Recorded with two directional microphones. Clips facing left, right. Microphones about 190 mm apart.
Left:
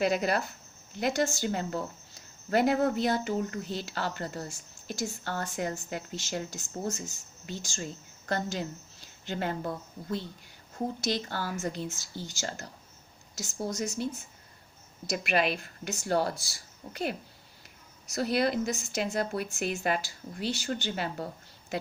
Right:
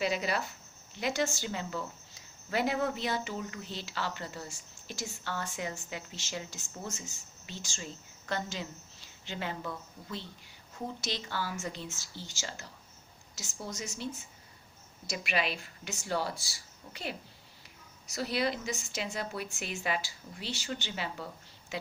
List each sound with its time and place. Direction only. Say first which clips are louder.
0.0 s speech: left 5 dB; 50° left (ahead or behind)
15.1 s speech: left 5 dB; 50° left (ahead or behind)